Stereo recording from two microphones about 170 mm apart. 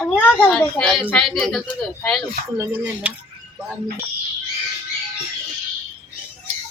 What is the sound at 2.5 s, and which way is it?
Speech, 10° right (ahead or behind).